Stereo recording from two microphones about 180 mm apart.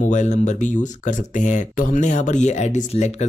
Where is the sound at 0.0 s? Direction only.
40° left (ahead or behind).